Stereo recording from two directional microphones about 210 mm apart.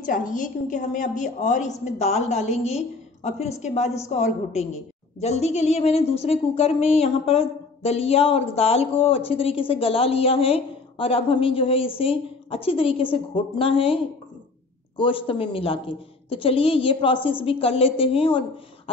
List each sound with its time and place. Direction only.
0.0 s a woman's voice: 40° left (ahead or behind)
5.2 s speech: 30° left (ahead or behind)